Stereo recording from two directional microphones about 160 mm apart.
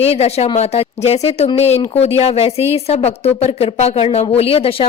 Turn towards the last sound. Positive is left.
turn(degrees=35)  # may be behind; listen again after turning